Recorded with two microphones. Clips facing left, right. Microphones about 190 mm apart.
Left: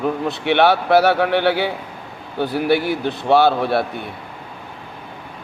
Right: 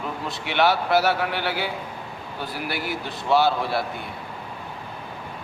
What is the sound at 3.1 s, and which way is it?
Speech, 60° left (ahead or behind).